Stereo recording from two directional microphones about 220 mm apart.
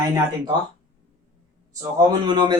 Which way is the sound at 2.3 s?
20° right (ahead or behind).